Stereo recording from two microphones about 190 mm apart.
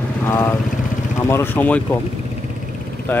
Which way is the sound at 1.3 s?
10° left (ahead or behind).